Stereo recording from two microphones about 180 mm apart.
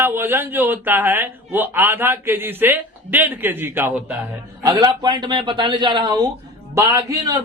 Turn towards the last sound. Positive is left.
turn(degrees=-15)  # may be behind; listen again after turning